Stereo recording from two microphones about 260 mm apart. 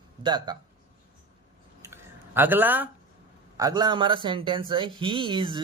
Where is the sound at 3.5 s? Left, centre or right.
Centre.